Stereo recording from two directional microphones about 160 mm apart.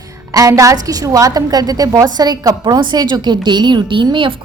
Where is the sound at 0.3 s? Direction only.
20° right (ahead or behind).